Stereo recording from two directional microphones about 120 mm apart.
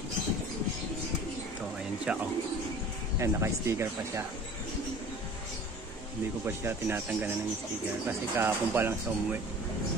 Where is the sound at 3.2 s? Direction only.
25° right (ahead or behind).